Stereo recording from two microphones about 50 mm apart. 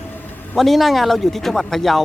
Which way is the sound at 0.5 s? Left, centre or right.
Centre.